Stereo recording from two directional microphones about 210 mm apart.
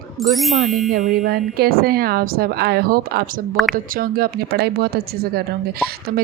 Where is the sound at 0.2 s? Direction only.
Centre (ahead or behind).